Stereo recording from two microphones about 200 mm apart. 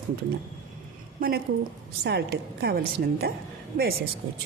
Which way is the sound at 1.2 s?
50° right (ahead or behind).